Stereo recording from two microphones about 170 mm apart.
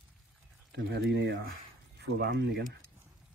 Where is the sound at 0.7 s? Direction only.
90° right.